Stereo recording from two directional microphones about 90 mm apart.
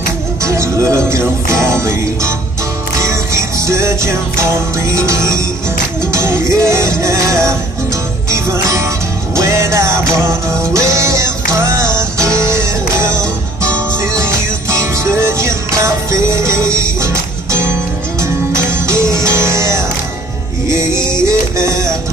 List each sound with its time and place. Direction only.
0.4 s music: 35° right (ahead or behind)
21.3 s music: 35° right (ahead or behind)